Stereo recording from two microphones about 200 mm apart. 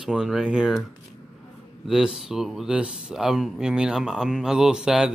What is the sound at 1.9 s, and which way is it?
Speech, 5° right (ahead or behind).